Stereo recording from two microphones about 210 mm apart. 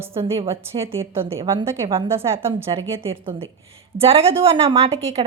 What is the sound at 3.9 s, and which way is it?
A woman's voice, 25° right (ahead or behind).